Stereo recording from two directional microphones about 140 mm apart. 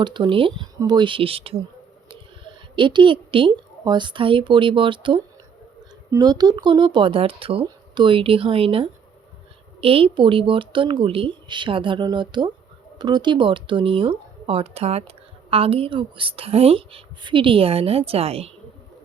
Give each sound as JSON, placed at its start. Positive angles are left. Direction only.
{"t": 0.0, "sound": "a woman's voice", "side_deg": -35}